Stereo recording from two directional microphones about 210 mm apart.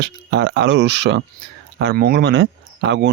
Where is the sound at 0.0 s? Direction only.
55° right (ahead or behind).